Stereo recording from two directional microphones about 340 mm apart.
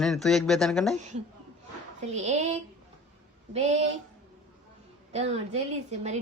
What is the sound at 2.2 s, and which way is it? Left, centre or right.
A woman's voice, centre.